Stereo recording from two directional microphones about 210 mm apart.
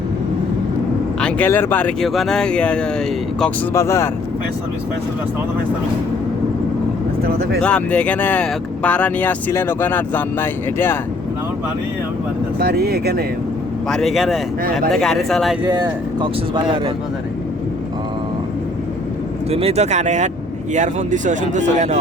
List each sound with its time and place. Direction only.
1.2 s speech: 10° left (ahead or behind)
7.2 s speech: 45° right (ahead or behind)
7.6 s speech: 5° left (ahead or behind)
12.5 s speech: 50° right (ahead or behind)
13.8 s speech: centre (ahead or behind)
16.2 s speech: 25° right (ahead or behind)
19.5 s speech: 30° right (ahead or behind)